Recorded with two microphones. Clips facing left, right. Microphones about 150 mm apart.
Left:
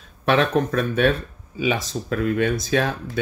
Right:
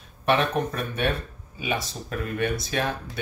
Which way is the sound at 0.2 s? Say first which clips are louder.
Left 4 dB; 90° left.